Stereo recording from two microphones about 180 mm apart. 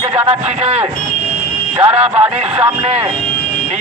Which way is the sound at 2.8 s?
35° right (ahead or behind).